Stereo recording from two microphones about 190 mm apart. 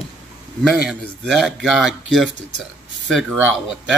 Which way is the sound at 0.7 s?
Centre (ahead or behind).